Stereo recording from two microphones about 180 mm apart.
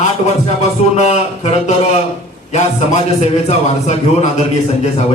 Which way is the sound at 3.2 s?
35° left (ahead or behind).